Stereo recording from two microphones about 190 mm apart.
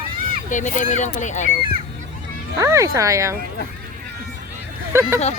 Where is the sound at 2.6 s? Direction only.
15° right (ahead or behind).